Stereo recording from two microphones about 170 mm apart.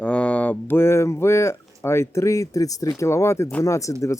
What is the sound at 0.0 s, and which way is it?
Speech, 5° left (ahead or behind).